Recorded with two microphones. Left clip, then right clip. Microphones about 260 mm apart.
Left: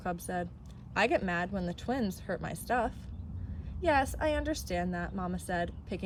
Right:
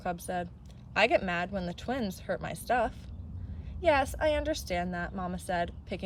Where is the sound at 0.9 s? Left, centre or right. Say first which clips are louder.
Right 3 dB; centre.